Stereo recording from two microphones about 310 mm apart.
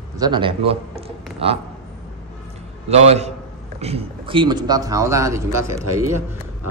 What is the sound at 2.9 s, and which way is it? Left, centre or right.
A man's voice, right.